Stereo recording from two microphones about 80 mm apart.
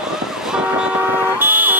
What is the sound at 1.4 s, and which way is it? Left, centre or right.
Vehicle, right.